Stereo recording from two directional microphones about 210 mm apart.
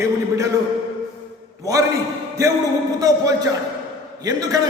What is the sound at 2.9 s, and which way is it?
Speech, 15° right (ahead or behind).